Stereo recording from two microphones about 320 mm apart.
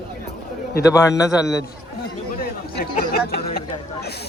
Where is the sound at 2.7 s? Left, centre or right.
Left.